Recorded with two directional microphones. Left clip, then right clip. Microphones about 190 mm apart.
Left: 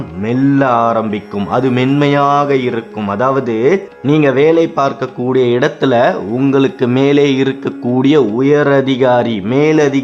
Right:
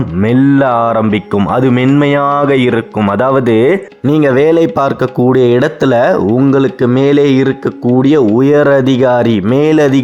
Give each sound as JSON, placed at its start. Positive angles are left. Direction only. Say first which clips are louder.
{"t": 0.3, "sound": "a man's voice", "louder": "right 2 dB", "side_deg": -40}
{"t": 4.0, "sound": "a man's voice", "louder": "right 2 dB", "side_deg": -30}
{"t": 6.3, "sound": "a man's voice", "louder": "right 2 dB", "side_deg": -20}
{"t": 8.2, "sound": "a man's voice", "louder": "right 3 dB", "side_deg": -35}